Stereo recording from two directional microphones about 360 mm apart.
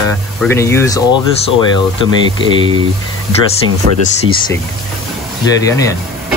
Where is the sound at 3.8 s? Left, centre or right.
Right.